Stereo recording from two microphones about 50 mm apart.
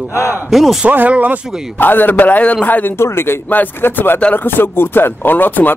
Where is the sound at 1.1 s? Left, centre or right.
Right.